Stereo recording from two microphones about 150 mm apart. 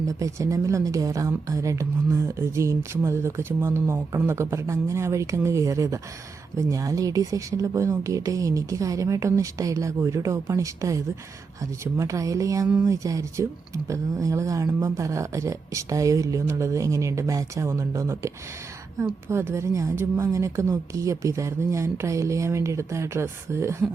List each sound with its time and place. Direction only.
0.0 s a woman's voice: 25° right (ahead or behind)
19.3 s a woman's voice: 15° right (ahead or behind)